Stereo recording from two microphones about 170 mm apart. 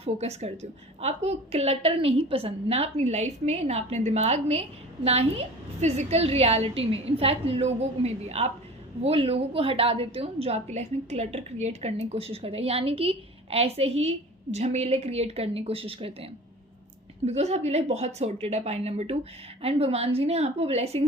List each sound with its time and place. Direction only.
0.0 s a woman's voice: 40° right (ahead or behind)
5.8 s a woman's voice: 40° right (ahead or behind)